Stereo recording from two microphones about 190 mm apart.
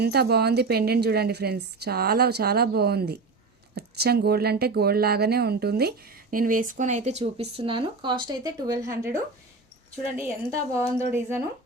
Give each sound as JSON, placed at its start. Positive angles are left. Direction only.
{"t": 0.0, "sound": "a woman's voice", "side_deg": -60}